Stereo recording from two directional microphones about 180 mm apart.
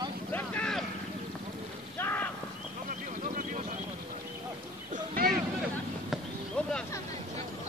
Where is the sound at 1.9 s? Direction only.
10° left (ahead or behind).